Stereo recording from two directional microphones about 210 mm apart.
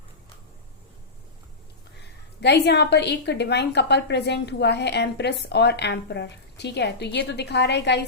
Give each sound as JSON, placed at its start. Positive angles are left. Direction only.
{"t": 2.4, "sound": "a woman's voice", "side_deg": 55}